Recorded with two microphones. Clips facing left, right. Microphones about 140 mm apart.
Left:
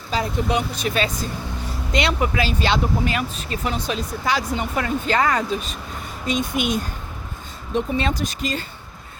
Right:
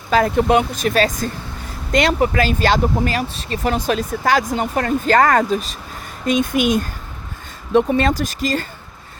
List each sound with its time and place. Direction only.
0.1 s speech: 60° right (ahead or behind); by 3.7 s 35° right (ahead or behind)
3.7 s speech: 50° right (ahead or behind)
6.5 s speech: 5° right (ahead or behind)
7.7 s speech: 60° right (ahead or behind); by 8.6 s 45° right (ahead or behind)